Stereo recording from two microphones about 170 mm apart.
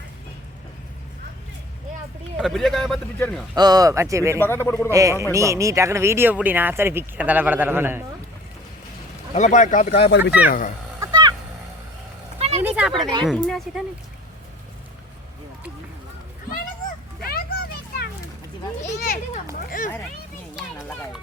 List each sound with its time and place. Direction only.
2.4 s speech: centre (ahead or behind)
3.5 s speech: 25° right (ahead or behind)
4.4 s speech: 15° left (ahead or behind)
4.9 s speech: 20° right (ahead or behind)
9.3 s speech: 45° left (ahead or behind)
10.1 s speech: 90° left
11.0 s a sound: 25° right (ahead or behind)
12.4 s a sound: 40° right (ahead or behind)
12.6 s a sound: 10° right (ahead or behind)
12.9 s speech: 25° right (ahead or behind)
13.2 s speech: centre (ahead or behind)
17.2 s a sound: 60° left (ahead or behind)
18.9 s a child's voice: 55° left (ahead or behind)